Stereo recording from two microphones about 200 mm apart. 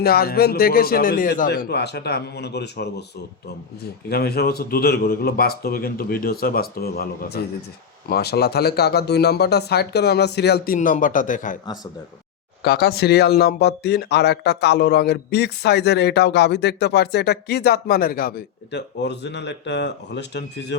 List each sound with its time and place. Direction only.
0.0 s a man's voice: 50° left (ahead or behind)
4.1 s a man's voice: 50° left (ahead or behind)
10.8 s a man's voice: 40° left (ahead or behind)
11.6 s speech: 20° left (ahead or behind)
12.6 s speech: 50° left (ahead or behind)